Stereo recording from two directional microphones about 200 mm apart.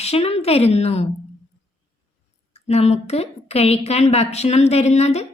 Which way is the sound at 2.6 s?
30° left (ahead or behind).